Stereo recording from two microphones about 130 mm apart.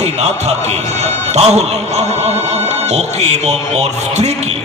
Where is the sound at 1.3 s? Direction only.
55° right (ahead or behind).